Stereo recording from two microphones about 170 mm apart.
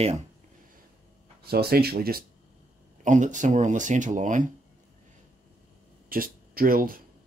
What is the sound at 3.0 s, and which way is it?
Speech, 45° right (ahead or behind).